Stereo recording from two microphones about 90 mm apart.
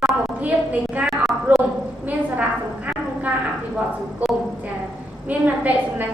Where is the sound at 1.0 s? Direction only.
Centre (ahead or behind).